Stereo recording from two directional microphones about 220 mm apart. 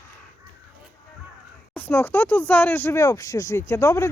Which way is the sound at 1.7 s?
10° left (ahead or behind).